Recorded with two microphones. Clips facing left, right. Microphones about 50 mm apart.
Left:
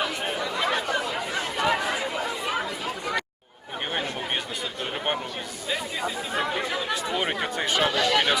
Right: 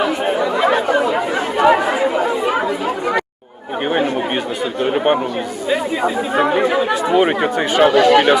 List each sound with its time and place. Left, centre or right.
0.0 s chatter: centre
4.8 s chatter: right
5.7 s speech: right